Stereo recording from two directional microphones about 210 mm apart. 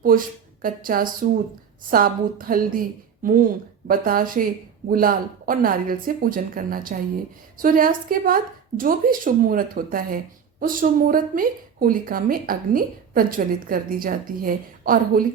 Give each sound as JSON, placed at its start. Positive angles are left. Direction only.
{"t": 0.0, "sound": "speech", "side_deg": -40}